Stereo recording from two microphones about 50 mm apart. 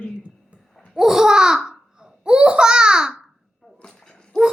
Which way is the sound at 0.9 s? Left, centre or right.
Centre.